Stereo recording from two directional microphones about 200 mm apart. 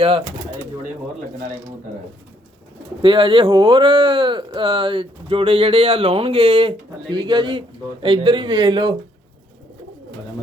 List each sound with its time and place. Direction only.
3.0 s speech: 25° right (ahead or behind)